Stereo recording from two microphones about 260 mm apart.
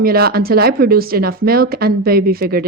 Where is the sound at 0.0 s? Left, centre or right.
Right.